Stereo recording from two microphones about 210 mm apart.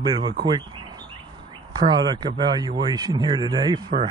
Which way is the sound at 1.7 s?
20° right (ahead or behind).